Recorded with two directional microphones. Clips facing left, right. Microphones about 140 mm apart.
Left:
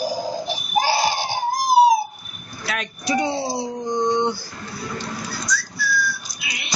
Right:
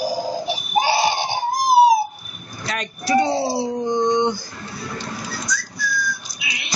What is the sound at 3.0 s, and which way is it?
Speech, 20° left (ahead or behind).